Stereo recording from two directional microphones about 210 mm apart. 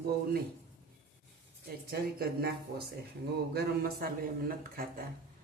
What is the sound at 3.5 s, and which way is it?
Speech, 45° right (ahead or behind).